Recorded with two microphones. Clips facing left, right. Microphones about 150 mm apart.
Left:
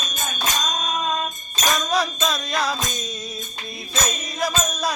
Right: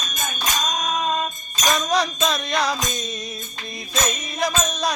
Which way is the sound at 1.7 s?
Centre (ahead or behind).